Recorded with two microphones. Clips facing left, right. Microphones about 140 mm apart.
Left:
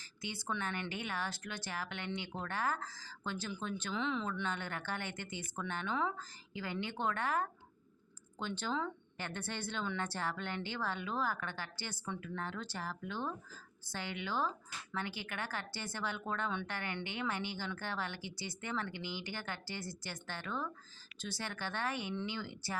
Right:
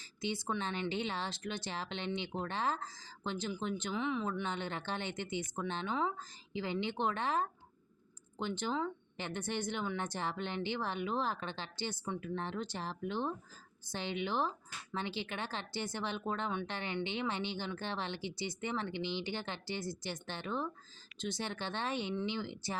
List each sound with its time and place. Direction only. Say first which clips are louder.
0.0 s speech: right 6 dB; 20° right (ahead or behind)